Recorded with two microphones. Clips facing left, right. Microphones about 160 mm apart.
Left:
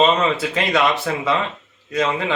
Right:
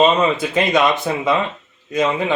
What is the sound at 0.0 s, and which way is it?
Speech, 15° right (ahead or behind).